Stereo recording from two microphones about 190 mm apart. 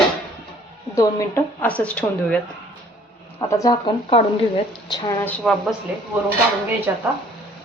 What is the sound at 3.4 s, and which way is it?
Speech, 20° left (ahead or behind).